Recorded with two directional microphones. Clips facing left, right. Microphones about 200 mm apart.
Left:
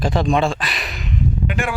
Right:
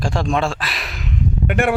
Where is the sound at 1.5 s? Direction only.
60° right (ahead or behind).